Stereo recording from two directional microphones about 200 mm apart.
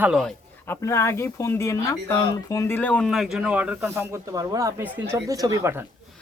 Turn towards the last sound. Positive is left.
turn(degrees=-15)  # may be behind; listen again after turning